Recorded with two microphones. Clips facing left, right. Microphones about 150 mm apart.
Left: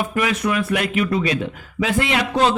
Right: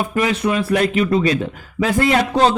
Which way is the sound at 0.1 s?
30° right (ahead or behind).